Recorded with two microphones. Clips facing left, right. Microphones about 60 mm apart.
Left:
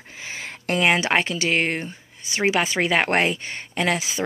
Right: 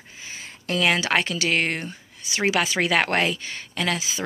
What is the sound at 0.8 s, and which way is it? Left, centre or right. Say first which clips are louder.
Speech: left 2 dB; left.